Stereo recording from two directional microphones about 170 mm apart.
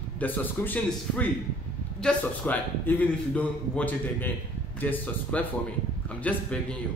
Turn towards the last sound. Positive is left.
turn(degrees=10)  # may be behind; listen again after turning